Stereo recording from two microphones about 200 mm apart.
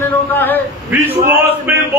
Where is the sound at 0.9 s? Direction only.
10° right (ahead or behind).